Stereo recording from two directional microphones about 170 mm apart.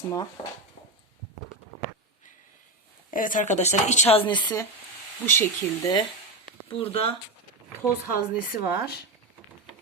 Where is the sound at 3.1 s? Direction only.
50° left (ahead or behind); by 4.4 s 35° left (ahead or behind).